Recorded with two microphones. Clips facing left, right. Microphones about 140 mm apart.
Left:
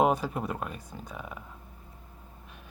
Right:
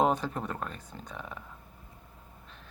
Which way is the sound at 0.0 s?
10° left (ahead or behind).